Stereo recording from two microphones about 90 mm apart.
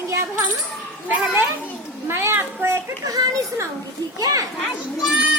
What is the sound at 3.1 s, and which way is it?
A child's voice, 40° right (ahead or behind).